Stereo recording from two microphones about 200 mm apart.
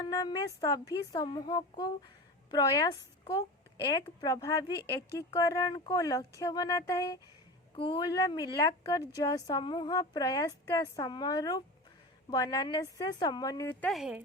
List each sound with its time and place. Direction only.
0.0 s speech: 20° left (ahead or behind); by 14.2 s centre (ahead or behind)